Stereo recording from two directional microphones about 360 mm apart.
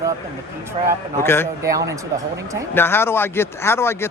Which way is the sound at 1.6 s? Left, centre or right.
Centre.